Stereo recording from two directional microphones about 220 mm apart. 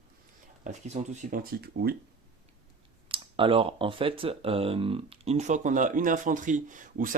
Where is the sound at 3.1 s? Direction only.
25° right (ahead or behind).